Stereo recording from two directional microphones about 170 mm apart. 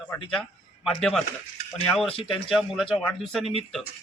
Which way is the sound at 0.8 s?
5° left (ahead or behind).